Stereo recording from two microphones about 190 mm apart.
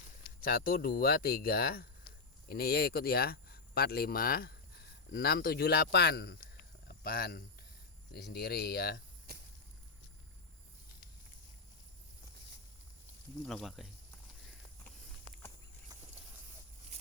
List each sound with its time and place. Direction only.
0.4 s speech: 50° left (ahead or behind)
6.8 s a sound: 50° left (ahead or behind)
8.1 s speech: 55° left (ahead or behind)
13.4 s speech: centre (ahead or behind)